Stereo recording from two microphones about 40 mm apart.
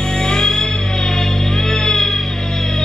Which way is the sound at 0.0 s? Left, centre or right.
Centre.